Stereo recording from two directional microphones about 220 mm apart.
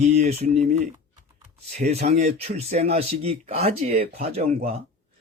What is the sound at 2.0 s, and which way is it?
Speech, 30° right (ahead or behind).